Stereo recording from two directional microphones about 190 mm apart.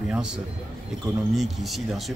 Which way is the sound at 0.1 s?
5° right (ahead or behind).